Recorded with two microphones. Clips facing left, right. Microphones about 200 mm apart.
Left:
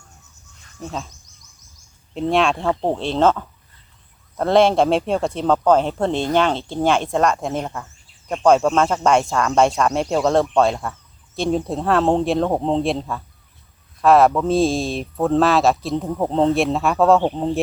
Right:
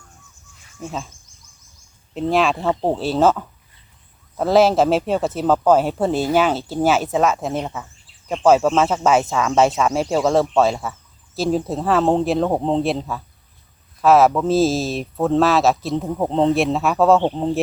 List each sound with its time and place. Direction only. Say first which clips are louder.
0.8 s speech: even; 5° right (ahead or behind)
2.3 s speech: even; centre (ahead or behind)
2.6 s speech: right 1 dB; 20° right (ahead or behind)
3.0 s speech: right 1 dB; 5° right (ahead or behind)